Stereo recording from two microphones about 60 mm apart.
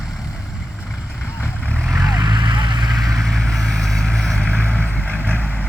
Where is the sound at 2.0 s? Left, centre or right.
Right.